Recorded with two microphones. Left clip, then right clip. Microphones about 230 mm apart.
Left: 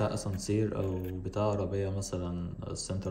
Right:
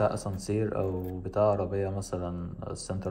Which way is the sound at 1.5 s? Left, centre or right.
Left.